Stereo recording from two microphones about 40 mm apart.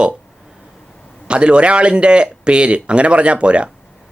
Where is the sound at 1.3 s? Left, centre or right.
Right.